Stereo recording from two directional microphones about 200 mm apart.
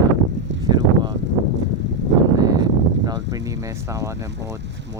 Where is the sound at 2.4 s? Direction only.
20° right (ahead or behind).